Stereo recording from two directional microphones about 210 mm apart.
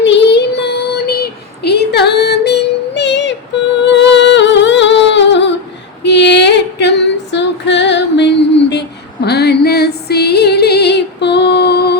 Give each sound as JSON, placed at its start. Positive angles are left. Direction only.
{"t": 0.0, "sound": "child singing", "side_deg": 55}
{"t": 3.8, "sound": "music", "side_deg": 55}
{"t": 6.0, "sound": "female singing", "side_deg": 55}